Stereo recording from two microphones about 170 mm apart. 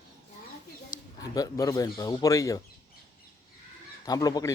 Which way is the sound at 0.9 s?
20° left (ahead or behind).